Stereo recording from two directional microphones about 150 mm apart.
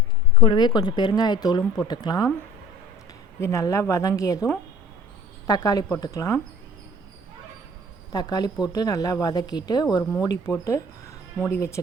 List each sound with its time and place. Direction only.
0.3 s speech: 30° left (ahead or behind)
3.4 s speech: 20° left (ahead or behind)
5.5 s speech: 25° left (ahead or behind)
8.1 s speech: 25° left (ahead or behind)